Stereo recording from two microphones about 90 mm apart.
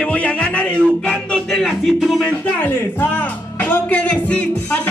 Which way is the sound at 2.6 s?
20° left (ahead or behind).